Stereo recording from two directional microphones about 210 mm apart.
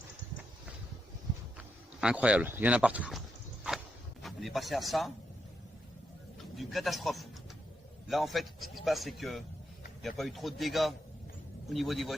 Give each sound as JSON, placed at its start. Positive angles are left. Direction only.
{"t": 1.5, "sound": "speech", "side_deg": -5}
{"t": 4.2, "sound": "speech", "side_deg": 0}
{"t": 6.6, "sound": "speech", "side_deg": 0}